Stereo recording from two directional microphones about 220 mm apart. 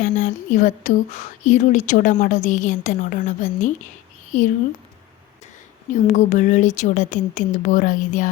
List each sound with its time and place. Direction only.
0.0 s a woman's voice: 35° left (ahead or behind)
5.9 s a woman's voice: 35° left (ahead or behind)